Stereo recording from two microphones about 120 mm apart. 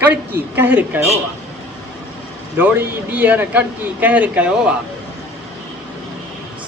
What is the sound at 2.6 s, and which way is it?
Speech, 15° right (ahead or behind).